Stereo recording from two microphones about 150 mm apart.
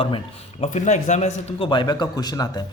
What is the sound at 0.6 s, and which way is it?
Speech, 50° left (ahead or behind).